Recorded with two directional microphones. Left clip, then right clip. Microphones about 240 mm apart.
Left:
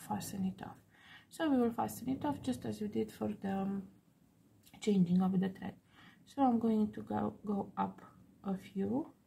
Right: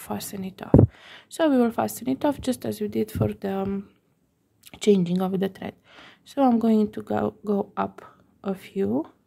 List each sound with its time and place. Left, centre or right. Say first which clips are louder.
0.0 s a woman's voice: right 8 dB; right